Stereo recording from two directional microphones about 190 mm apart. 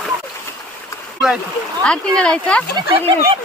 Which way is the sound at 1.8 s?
5° left (ahead or behind).